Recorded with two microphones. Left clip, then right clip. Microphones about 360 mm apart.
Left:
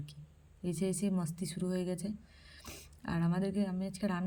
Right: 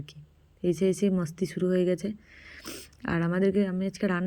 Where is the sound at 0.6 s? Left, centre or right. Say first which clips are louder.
Right 11 dB; centre.